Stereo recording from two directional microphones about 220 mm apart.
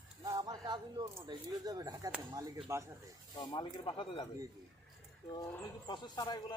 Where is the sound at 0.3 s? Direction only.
15° right (ahead or behind).